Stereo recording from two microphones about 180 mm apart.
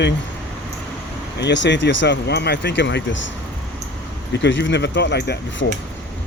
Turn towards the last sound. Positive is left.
turn(degrees=65)  # may be behind; listen again after turning